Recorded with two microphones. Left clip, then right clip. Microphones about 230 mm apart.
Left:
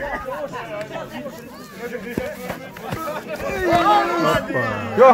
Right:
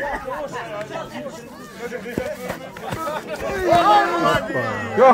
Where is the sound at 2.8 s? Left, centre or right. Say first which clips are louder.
Right 1 dB; right.